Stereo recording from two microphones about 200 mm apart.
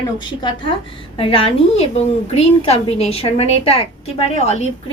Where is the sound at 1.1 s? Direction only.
30° left (ahead or behind).